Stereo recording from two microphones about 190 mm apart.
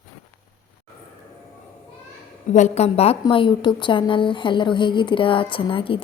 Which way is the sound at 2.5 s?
35° left (ahead or behind).